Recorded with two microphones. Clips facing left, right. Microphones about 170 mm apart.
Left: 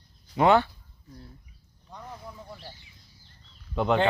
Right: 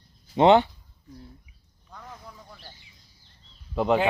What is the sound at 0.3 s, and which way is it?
Speech, 20° right (ahead or behind).